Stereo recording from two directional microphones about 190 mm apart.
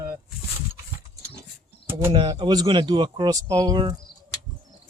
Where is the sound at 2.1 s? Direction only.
25° right (ahead or behind).